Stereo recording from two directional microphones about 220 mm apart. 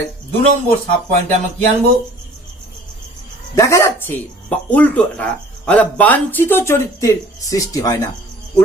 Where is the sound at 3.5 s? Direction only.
15° left (ahead or behind).